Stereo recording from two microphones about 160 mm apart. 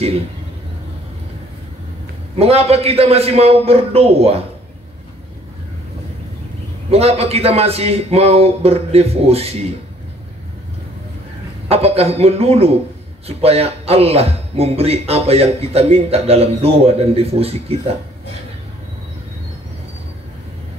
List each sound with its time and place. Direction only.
2.3 s speech: 40° right (ahead or behind)
6.9 s speech: 40° right (ahead or behind)
11.7 s speech: 40° right (ahead or behind)